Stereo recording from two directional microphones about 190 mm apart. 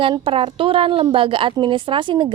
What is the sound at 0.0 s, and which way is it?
A woman's voice, 30° right (ahead or behind).